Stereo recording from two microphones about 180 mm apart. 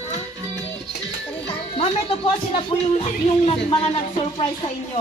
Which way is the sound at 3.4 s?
35° left (ahead or behind).